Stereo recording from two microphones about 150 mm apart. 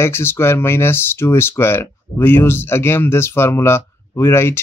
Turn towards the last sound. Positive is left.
turn(degrees=15)  # may be behind; listen again after turning